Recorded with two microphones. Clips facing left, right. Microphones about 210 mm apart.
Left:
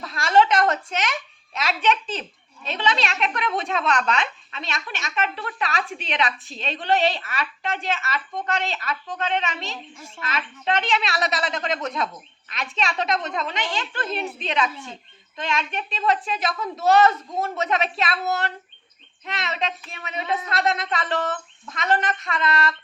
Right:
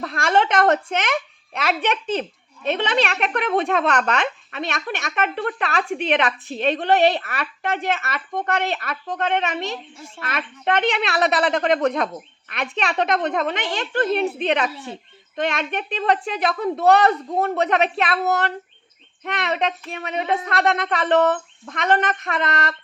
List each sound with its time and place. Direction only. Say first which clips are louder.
0.0 s a woman's voice: left 1 dB; 55° right (ahead or behind)